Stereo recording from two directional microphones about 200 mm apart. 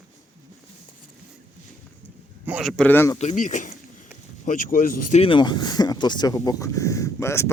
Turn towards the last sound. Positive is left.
turn(degrees=15)  # may be behind; listen again after turning